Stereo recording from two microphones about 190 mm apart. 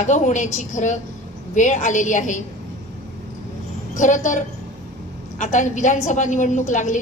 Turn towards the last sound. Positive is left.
turn(degrees=40)  # may be behind; listen again after turning